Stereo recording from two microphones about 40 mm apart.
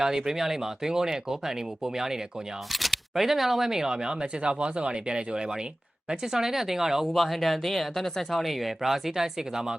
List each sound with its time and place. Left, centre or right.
0.0 s speech: centre
2.7 s speech: centre
7.1 s speech: centre